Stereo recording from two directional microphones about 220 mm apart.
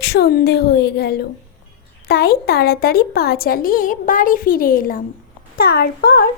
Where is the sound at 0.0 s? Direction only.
45° left (ahead or behind).